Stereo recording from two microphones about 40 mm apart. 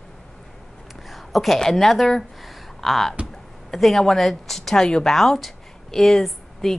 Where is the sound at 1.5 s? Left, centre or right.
Centre.